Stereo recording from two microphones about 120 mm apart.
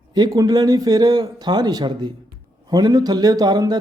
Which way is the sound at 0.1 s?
30° right (ahead or behind).